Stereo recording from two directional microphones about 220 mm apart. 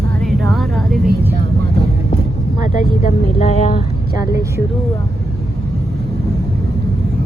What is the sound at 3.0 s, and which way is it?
Speech, 30° left (ahead or behind).